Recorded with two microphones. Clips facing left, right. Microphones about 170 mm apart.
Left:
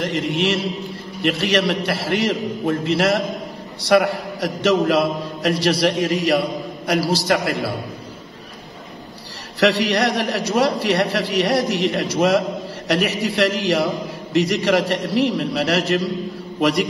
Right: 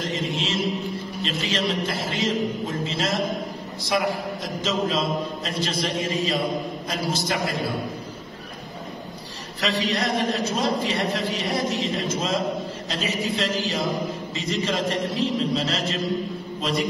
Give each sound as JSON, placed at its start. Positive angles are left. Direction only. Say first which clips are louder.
{"t": 0.0, "sound": "chant", "louder": "left 6 dB", "side_deg": 65}
{"t": 1.2, "sound": "a man's voice", "louder": "left 8 dB", "side_deg": 70}
{"t": 9.6, "sound": "a man's voice", "louder": "left 8 dB", "side_deg": 75}